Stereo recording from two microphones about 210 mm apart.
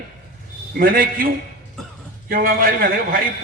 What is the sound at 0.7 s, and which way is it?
Speech, 45° right (ahead or behind).